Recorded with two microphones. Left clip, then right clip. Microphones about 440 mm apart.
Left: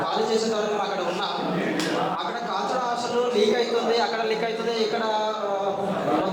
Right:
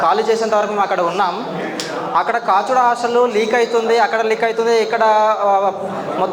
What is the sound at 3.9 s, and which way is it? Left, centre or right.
Speech, right.